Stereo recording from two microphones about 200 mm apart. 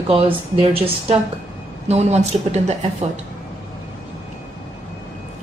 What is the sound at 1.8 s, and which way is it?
Speech, 35° right (ahead or behind).